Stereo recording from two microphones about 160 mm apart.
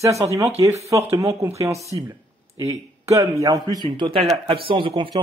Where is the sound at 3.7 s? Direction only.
30° right (ahead or behind).